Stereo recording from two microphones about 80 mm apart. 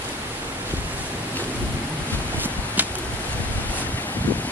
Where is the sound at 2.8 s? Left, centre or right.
Right.